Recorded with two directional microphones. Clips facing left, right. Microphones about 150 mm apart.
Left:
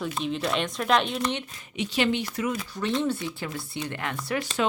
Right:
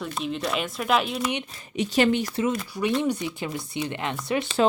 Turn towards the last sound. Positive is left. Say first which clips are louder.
# right 3 dB
turn(degrees=-20)  # may be behind; listen again after turning